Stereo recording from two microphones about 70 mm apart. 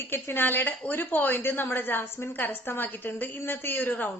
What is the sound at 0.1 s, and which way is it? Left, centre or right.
A woman's voice, left.